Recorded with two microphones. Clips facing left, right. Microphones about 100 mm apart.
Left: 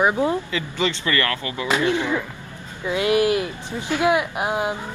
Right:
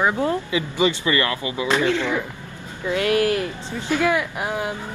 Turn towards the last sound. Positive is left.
turn(degrees=20)  # may be behind; listen again after turning